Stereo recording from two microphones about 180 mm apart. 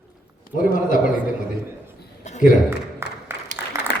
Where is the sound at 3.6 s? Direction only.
10° right (ahead or behind).